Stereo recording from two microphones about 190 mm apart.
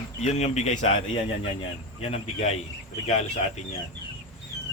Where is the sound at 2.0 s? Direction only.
30° left (ahead or behind).